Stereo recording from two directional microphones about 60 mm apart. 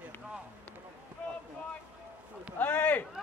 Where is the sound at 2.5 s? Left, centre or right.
Left.